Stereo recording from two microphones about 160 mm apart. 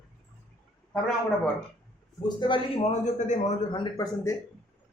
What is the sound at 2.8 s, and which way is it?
Speech, 45° left (ahead or behind).